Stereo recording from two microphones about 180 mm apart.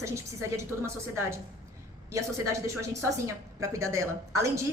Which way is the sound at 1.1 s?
15° right (ahead or behind).